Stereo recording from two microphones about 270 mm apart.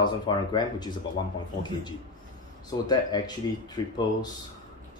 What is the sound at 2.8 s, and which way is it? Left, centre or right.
Speech, centre.